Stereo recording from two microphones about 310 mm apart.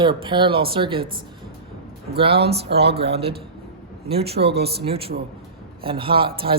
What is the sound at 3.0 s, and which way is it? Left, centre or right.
Speech, centre.